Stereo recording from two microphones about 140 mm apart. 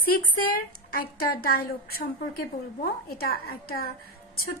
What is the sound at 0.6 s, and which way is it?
A woman's voice, 90° left.